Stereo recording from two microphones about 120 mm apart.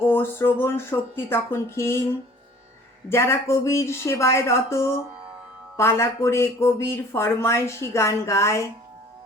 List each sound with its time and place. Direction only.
0.0 s speech: 20° left (ahead or behind)
3.1 s speech: 20° left (ahead or behind)